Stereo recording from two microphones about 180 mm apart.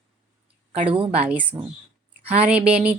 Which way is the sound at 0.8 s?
30° right (ahead or behind).